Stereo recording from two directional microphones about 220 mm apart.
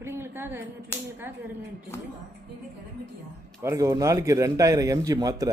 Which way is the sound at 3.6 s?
15° right (ahead or behind).